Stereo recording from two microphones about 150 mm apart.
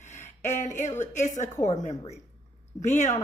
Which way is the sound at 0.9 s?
55° left (ahead or behind).